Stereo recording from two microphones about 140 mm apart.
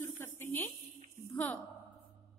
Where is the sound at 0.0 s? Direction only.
15° left (ahead or behind).